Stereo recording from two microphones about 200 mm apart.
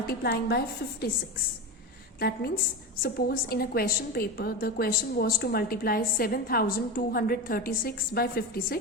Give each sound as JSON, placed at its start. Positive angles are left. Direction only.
{"t": 0.1, "sound": "a woman's voice", "side_deg": 50}
{"t": 2.1, "sound": "a woman's voice", "side_deg": 50}